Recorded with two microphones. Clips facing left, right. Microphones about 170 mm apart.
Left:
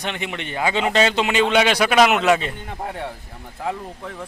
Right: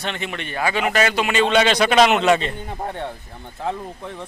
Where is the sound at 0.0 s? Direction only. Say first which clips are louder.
Even; 15° left (ahead or behind).